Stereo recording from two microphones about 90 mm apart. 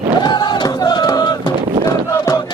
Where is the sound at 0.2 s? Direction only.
55° left (ahead or behind).